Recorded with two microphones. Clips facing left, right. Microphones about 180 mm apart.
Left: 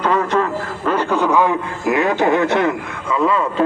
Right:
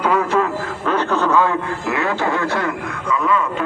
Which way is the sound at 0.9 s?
10° left (ahead or behind).